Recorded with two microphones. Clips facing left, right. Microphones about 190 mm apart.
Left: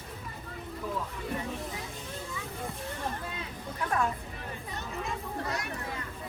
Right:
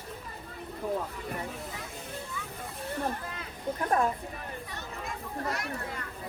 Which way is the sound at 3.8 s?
35° right (ahead or behind).